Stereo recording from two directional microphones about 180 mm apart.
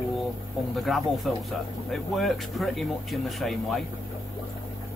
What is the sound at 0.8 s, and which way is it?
Speech, centre (ahead or behind).